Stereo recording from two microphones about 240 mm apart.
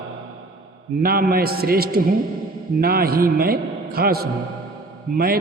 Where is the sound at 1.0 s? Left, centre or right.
Right.